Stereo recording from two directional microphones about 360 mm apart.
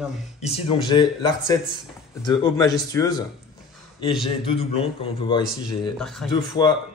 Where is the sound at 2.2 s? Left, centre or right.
Centre.